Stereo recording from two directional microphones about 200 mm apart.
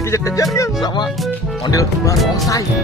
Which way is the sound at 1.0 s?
Centre (ahead or behind).